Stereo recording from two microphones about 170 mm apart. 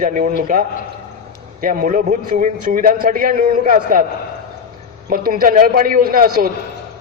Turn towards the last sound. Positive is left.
turn(degrees=-60)  # may be behind; listen again after turning